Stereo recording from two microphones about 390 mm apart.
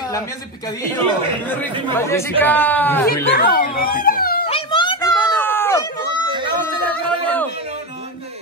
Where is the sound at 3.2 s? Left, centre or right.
Left; by 5.8 s centre.